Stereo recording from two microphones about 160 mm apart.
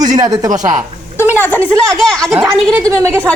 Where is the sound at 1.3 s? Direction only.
10° left (ahead or behind).